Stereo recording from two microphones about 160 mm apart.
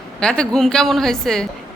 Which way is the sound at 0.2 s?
5° left (ahead or behind).